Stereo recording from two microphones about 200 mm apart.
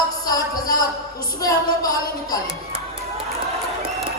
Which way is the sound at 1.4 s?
15° left (ahead or behind).